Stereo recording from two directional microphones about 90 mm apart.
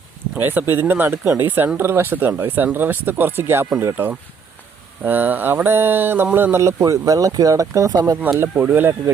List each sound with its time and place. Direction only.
0.4 s speech: 25° right (ahead or behind)
8.5 s speech: 20° right (ahead or behind)